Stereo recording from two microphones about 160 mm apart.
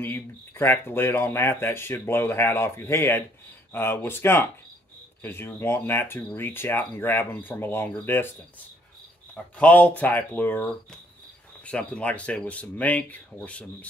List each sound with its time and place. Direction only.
0.0 s speech: 15° left (ahead or behind)
9.3 s speech: 10° left (ahead or behind)